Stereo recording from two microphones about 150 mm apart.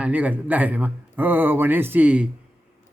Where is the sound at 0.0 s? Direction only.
10° right (ahead or behind).